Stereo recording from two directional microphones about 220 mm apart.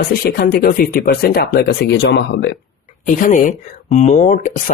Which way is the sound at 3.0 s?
35° left (ahead or behind).